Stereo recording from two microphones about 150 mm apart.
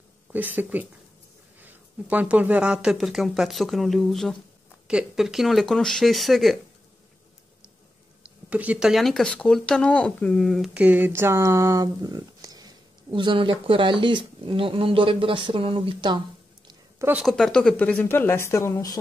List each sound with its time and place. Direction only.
0.3 s speech: 10° right (ahead or behind)
8.2 s speech: 10° right (ahead or behind); by 16.2 s 35° right (ahead or behind)
17.0 s speech: 10° right (ahead or behind)
17.3 s speech: 5° left (ahead or behind); by 18.9 s 20° left (ahead or behind)